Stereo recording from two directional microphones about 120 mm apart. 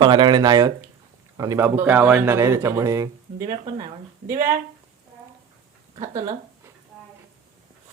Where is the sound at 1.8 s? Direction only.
15° right (ahead or behind); by 3.9 s 35° right (ahead or behind).